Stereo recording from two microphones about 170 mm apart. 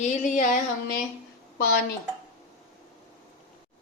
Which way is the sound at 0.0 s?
45° left (ahead or behind).